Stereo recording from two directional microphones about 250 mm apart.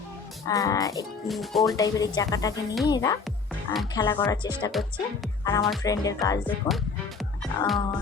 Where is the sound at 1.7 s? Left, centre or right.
Centre.